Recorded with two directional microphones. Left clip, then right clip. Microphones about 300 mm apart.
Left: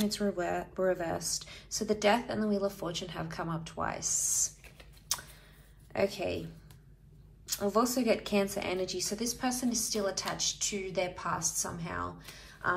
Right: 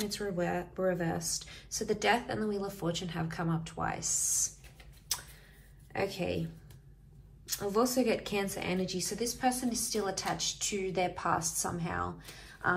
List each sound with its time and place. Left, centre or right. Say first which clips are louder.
0.1 s speech: left 1 dB; centre
5.9 s speech: left 2 dB; centre
7.4 s a woman's voice: left 1 dB; centre